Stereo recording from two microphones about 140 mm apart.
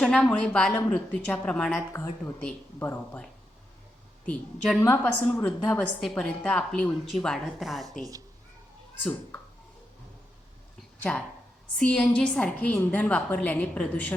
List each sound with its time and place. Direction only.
0.0 s a woman's voice: 5° left (ahead or behind)
1.9 s a woman's voice: 20° left (ahead or behind)
4.8 s a woman's voice: 15° left (ahead or behind)
11.8 s a woman's voice: 5° left (ahead or behind)